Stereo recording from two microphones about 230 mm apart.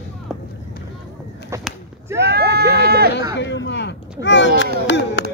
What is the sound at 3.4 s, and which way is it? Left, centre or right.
Speech, left.